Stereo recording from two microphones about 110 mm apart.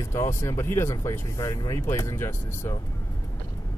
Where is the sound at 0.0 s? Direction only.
30° left (ahead or behind).